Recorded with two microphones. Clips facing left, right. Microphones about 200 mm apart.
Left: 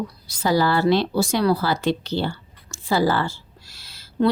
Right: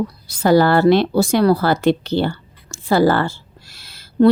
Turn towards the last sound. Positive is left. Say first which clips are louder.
# right 7 dB
turn(degrees=-55)  # may be behind; listen again after turning